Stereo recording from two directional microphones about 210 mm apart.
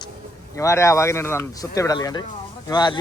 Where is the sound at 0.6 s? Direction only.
15° left (ahead or behind).